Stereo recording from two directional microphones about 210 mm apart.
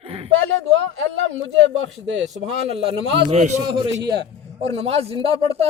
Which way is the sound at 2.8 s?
25° right (ahead or behind).